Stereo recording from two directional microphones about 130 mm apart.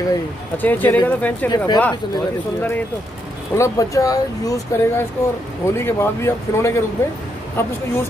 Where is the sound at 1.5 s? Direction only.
35° left (ahead or behind).